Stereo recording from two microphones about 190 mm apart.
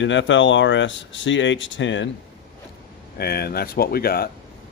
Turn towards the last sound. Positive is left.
turn(degrees=55)  # may be behind; listen again after turning